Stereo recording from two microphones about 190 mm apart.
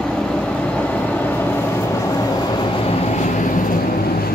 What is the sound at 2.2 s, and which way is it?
Vehicle, 25° left (ahead or behind).